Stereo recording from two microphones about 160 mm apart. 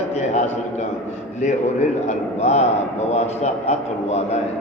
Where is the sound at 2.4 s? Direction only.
45° left (ahead or behind).